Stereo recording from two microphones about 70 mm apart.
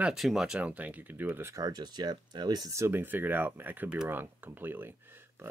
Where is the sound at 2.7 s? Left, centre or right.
Right.